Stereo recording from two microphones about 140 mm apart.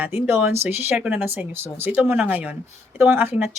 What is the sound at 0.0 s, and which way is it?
Speech, 15° right (ahead or behind).